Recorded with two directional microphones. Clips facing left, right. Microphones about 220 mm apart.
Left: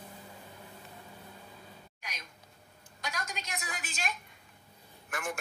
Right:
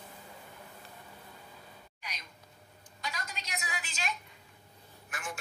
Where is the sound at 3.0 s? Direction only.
50° left (ahead or behind).